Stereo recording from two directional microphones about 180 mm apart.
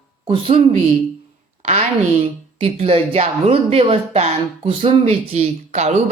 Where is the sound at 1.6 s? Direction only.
35° right (ahead or behind).